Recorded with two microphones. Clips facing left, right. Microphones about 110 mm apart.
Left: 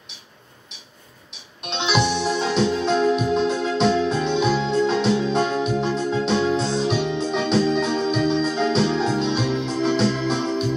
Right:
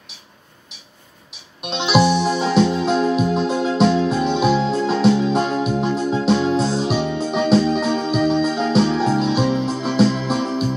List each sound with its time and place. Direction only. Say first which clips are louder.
1.6 s music: right 5 dB; 5° right (ahead or behind)
9.4 s music: right 4 dB; 40° right (ahead or behind)
9.9 s organ: right 4 dB; 5° right (ahead or behind)